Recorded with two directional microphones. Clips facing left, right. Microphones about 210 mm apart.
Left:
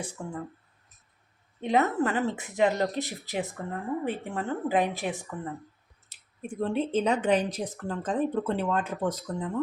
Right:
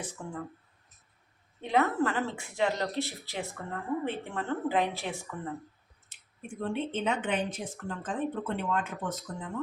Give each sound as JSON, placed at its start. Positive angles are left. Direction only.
{"t": 1.6, "sound": "speech", "side_deg": 20}
{"t": 4.0, "sound": "a woman's voice", "side_deg": 15}
{"t": 6.1, "sound": "speech", "side_deg": 40}